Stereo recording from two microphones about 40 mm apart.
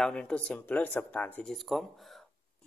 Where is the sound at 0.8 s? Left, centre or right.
Left.